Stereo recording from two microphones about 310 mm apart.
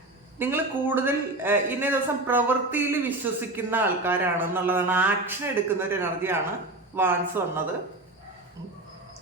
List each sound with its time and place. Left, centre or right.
0.3 s a man's voice: centre